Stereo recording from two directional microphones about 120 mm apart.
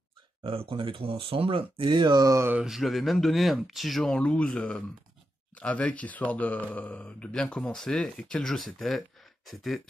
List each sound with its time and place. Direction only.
0.4 s speech: 50° right (ahead or behind); by 2.5 s 25° right (ahead or behind)
2.5 s speech: 5° right (ahead or behind)